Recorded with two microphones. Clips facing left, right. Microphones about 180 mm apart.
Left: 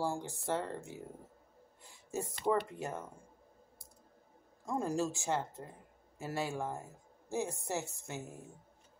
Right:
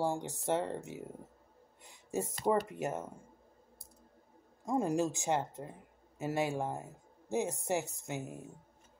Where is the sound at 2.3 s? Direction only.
40° right (ahead or behind).